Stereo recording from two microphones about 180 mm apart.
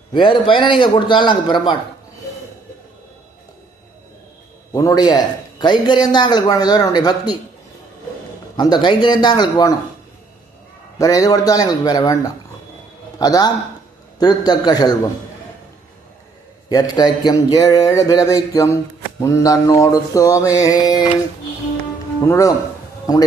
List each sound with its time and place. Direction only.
0.1 s a man's voice: 25° left (ahead or behind)
4.7 s a man's voice: 20° left (ahead or behind)
8.5 s a man's voice: 25° left (ahead or behind)
10.9 s a man's voice: 20° left (ahead or behind)
16.6 s a man's voice: 20° left (ahead or behind)
22.3 s a man's voice: 20° left (ahead or behind)